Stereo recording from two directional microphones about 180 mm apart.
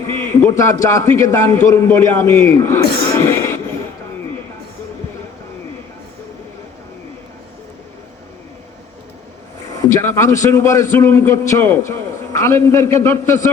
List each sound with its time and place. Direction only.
0.1 s a man's voice: 10° left (ahead or behind)
9.6 s a man's voice: 20° left (ahead or behind)